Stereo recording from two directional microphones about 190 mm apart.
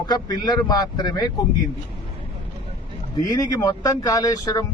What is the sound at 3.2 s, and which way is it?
Speech, 20° left (ahead or behind).